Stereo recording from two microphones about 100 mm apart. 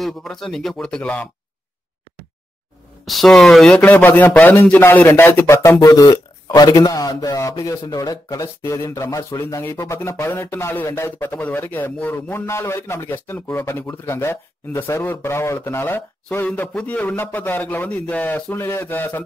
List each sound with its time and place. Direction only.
0.0 s speech: 5° left (ahead or behind)
3.1 s speech: centre (ahead or behind)
3.8 s a man's voice: 15° left (ahead or behind)